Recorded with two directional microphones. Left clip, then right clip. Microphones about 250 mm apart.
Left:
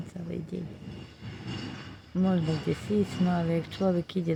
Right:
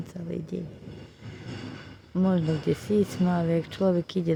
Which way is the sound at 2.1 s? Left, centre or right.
Centre.